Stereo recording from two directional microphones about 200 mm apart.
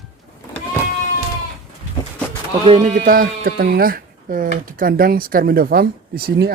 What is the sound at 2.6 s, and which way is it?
Speech, 35° right (ahead or behind).